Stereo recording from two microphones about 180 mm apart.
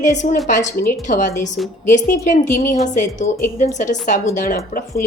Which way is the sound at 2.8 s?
45° left (ahead or behind).